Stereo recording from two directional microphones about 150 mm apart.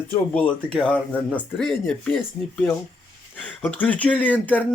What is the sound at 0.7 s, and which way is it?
Speech, 5° left (ahead or behind).